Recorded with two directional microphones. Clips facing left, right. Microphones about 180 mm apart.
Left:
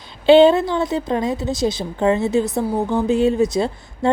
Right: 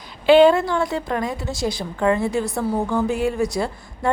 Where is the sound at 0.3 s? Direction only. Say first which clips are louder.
Left 2 dB; 25° left (ahead or behind).